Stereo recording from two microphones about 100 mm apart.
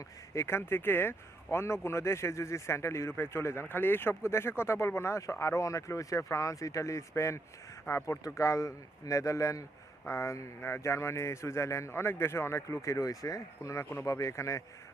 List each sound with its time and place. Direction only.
0.3 s a man's voice: 25° left (ahead or behind)